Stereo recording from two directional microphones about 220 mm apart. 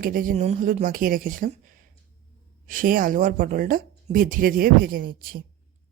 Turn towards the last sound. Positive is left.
turn(degrees=-40)  # may be behind; listen again after turning